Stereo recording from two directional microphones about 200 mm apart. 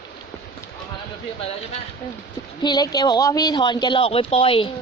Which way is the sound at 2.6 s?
20° left (ahead or behind).